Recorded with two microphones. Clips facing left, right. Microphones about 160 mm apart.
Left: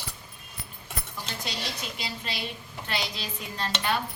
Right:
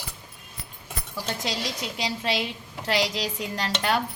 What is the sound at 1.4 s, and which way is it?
A woman's voice, 90° right.